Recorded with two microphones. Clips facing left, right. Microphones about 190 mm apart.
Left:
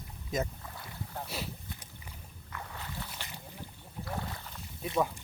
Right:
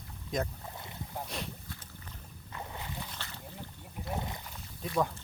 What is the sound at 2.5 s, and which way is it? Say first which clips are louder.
Boat: right 1 dB; 20° right (ahead or behind).